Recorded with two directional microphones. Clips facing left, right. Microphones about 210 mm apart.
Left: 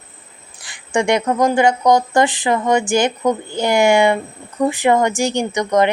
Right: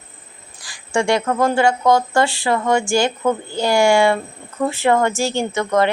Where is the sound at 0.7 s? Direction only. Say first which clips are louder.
Left 1 dB; 20° left (ahead or behind).